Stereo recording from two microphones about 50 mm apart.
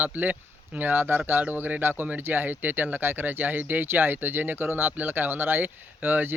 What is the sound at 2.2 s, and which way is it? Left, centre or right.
Speech, right.